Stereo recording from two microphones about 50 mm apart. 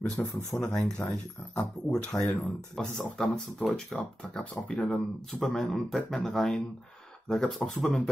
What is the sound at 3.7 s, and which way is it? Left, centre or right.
Speech, left.